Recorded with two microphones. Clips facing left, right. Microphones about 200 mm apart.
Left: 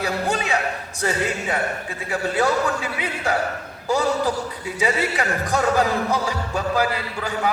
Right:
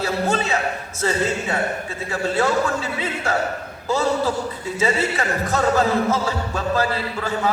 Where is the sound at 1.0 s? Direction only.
15° left (ahead or behind).